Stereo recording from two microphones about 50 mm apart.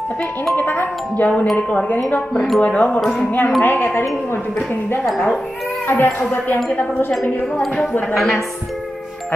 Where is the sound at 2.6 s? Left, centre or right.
Left.